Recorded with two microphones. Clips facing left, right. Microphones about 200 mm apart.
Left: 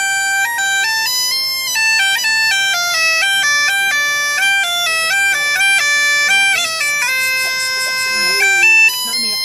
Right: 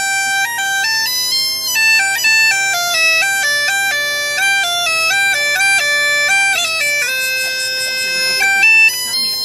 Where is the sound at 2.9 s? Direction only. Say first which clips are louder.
Right 2 dB; 30° right (ahead or behind).